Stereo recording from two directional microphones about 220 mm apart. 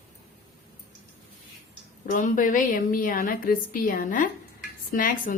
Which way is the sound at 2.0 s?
35° left (ahead or behind).